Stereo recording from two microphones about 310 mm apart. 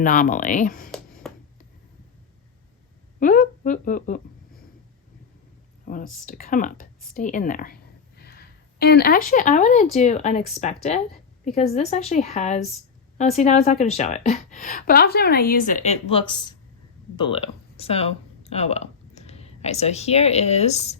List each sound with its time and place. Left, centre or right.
0.0 s a woman's voice: left
1.2 s a sound: centre
3.2 s a woman's voice: left
5.8 s a woman's voice: left